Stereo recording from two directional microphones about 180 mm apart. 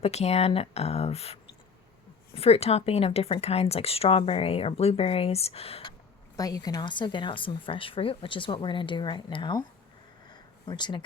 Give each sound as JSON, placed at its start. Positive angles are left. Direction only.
{"t": 0.0, "sound": "speech", "side_deg": 35}
{"t": 6.3, "sound": "speech", "side_deg": 20}
{"t": 10.2, "sound": "a sound", "side_deg": 25}